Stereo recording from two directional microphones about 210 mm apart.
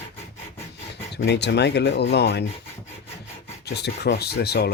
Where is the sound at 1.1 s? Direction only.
55° left (ahead or behind).